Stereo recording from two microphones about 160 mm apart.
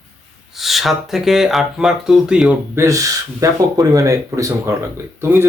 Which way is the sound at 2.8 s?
20° right (ahead or behind).